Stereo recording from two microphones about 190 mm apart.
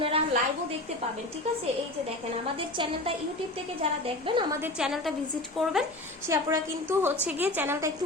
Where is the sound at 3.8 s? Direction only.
25° right (ahead or behind).